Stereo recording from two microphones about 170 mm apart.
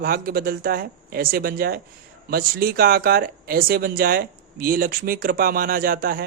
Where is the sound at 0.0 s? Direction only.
60° right (ahead or behind).